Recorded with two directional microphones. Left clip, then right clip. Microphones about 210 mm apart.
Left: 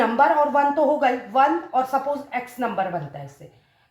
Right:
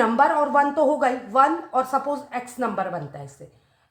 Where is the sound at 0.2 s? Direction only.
45° right (ahead or behind).